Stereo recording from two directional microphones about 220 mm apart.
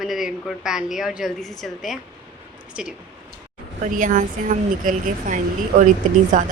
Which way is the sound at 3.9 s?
35° right (ahead or behind).